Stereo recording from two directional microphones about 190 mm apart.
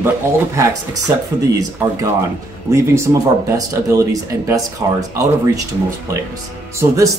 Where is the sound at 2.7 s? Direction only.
15° right (ahead or behind).